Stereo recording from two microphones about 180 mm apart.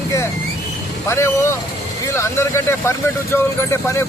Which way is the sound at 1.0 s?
15° left (ahead or behind).